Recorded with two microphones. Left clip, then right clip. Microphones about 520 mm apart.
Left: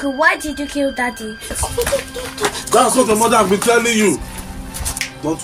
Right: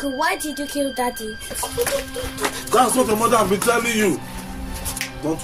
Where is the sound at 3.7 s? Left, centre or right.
Right.